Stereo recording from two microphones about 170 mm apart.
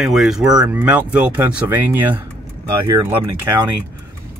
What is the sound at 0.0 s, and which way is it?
Speech, centre (ahead or behind).